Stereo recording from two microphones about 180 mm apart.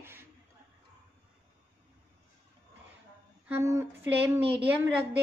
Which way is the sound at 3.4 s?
15° right (ahead or behind).